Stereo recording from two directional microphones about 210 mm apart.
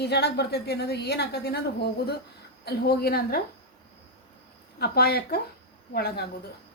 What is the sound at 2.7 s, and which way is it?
Speech, 50° left (ahead or behind).